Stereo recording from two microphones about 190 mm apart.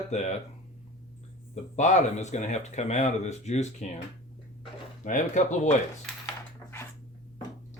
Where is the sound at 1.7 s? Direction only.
40° left (ahead or behind).